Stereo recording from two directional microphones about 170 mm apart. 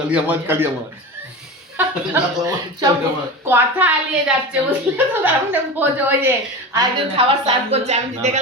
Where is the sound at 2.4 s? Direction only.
25° right (ahead or behind).